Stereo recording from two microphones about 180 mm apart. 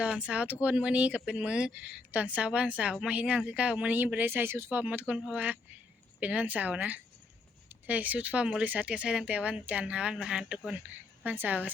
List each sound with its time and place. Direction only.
0.0 s speech: 5° right (ahead or behind)